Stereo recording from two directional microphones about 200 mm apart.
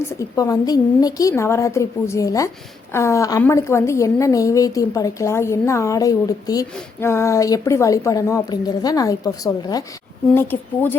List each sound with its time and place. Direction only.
0.1 s a woman's voice: 15° left (ahead or behind)